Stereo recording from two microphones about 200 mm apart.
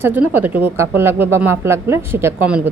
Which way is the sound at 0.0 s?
10° right (ahead or behind).